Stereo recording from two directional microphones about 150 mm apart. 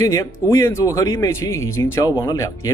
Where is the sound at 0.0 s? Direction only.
20° left (ahead or behind).